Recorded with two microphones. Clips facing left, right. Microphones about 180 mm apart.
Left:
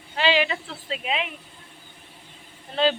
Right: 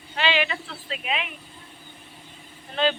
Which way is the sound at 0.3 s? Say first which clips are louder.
Left 3 dB; 35° left (ahead or behind).